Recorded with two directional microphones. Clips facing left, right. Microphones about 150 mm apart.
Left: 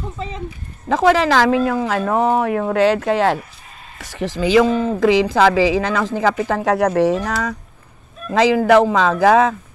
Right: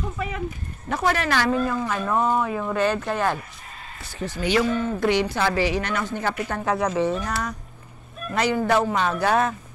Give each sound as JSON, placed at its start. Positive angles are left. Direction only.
{"t": 0.8, "sound": "speech", "side_deg": 90}
{"t": 4.0, "sound": "speech", "side_deg": 90}